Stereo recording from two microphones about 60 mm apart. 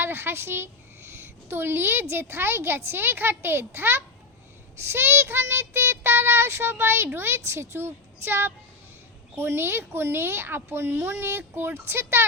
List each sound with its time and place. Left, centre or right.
0.0 s child singing: right